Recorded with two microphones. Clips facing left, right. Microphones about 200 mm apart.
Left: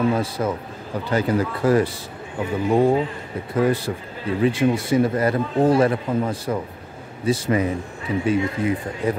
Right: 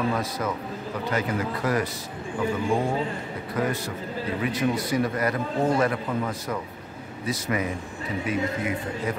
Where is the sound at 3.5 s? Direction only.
30° left (ahead or behind).